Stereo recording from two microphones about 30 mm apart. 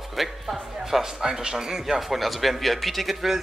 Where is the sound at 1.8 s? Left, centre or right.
Centre.